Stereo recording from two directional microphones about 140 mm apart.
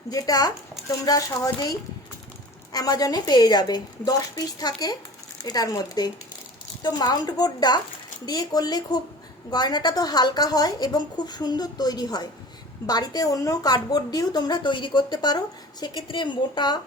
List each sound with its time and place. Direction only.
0.1 s a woman's voice: 25° left (ahead or behind)
2.7 s a woman's voice: 25° left (ahead or behind)